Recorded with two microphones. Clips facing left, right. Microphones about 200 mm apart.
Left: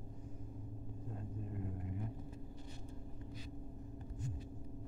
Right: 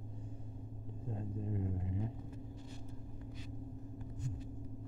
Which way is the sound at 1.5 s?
25° right (ahead or behind).